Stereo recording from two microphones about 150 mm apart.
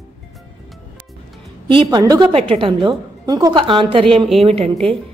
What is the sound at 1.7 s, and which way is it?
Speech, 30° right (ahead or behind).